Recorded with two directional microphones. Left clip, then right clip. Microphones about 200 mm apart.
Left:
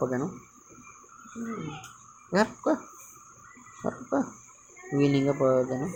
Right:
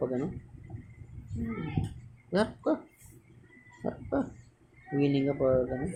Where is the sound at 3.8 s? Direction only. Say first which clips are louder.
Left 3 dB; 20° left (ahead or behind).